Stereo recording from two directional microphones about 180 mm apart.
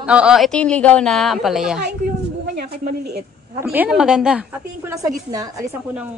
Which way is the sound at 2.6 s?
60° right (ahead or behind).